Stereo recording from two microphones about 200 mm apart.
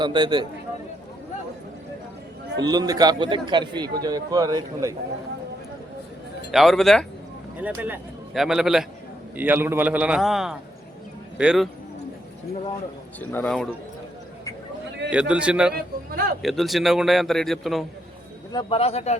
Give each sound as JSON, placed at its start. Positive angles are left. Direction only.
{"t": 0.0, "sound": "a man's voice", "side_deg": -25}
{"t": 2.6, "sound": "a man's voice", "side_deg": -20}
{"t": 6.5, "sound": "a man's voice", "side_deg": 0}
{"t": 13.1, "sound": "speech", "side_deg": 5}
{"t": 15.1, "sound": "a man's voice", "side_deg": -5}
{"t": 15.7, "sound": "a man's voice", "side_deg": -50}
{"t": 16.4, "sound": "a man's voice", "side_deg": 0}
{"t": 18.5, "sound": "speech", "side_deg": 30}